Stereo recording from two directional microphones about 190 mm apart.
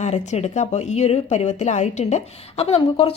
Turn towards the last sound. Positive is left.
turn(degrees=30)  # may be behind; listen again after turning